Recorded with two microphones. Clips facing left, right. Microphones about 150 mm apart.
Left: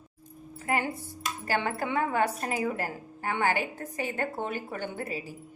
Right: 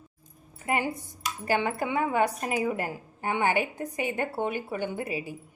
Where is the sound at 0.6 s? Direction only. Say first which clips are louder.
Right 1 dB; 15° right (ahead or behind).